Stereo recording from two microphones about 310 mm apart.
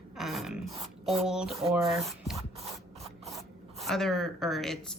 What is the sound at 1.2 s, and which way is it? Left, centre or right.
Speech, centre.